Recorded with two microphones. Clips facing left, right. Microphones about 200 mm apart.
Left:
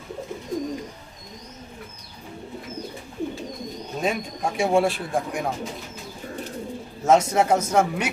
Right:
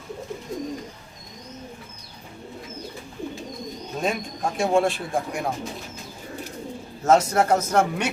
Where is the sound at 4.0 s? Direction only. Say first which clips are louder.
Left 1 dB; 5° left (ahead or behind).